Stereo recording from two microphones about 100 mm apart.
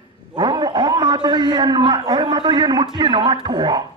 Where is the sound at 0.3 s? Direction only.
45° right (ahead or behind).